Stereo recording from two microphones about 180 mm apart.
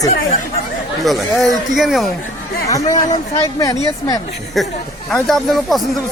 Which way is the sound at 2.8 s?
40° left (ahead or behind).